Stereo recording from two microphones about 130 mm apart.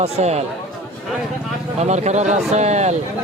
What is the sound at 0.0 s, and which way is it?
Speech, 55° right (ahead or behind).